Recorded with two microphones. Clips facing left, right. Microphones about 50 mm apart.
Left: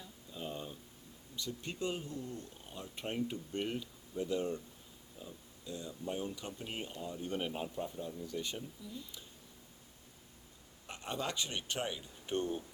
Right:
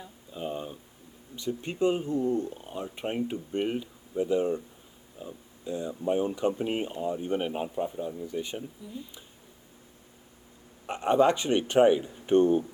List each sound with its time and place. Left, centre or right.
0.0 s a sound: right
1.4 s speech: right
10.8 s speech: right